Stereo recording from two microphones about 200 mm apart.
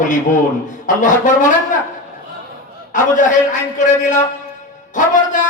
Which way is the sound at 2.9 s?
40° left (ahead or behind).